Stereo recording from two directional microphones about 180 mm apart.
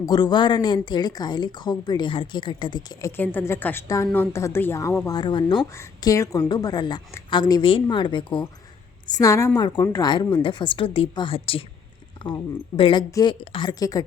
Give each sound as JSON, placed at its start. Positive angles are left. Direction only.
{"t": 0.0, "sound": "a woman's voice", "side_deg": 25}
{"t": 3.2, "sound": "a woman's voice", "side_deg": 10}